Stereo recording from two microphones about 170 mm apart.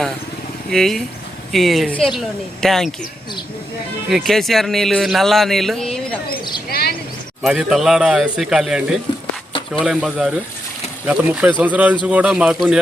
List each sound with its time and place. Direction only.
0.7 s a man's voice: centre (ahead or behind)
4.1 s a man's voice: centre (ahead or behind)
6.7 s speech: 65° left (ahead or behind)
7.4 s a man's voice: centre (ahead or behind)
9.5 s a sound: 30° left (ahead or behind)
9.8 s a man's voice: centre (ahead or behind)